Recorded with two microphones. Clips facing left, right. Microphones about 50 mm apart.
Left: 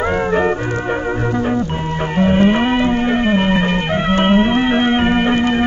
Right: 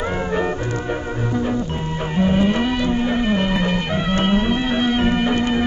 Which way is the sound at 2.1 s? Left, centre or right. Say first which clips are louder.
Left 4 dB; left.